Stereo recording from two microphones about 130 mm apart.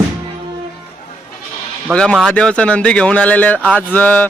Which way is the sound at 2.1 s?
5° left (ahead or behind).